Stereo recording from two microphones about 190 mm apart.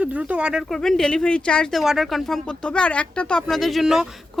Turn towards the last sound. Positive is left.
turn(degrees=0)  # may be behind; listen again after turning